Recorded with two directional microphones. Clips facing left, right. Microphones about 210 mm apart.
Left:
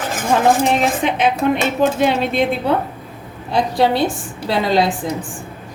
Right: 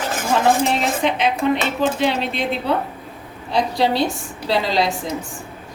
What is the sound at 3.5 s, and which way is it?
A woman's voice, 50° left (ahead or behind).